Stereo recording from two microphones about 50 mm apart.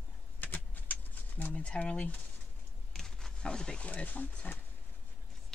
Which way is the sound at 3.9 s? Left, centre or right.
Left.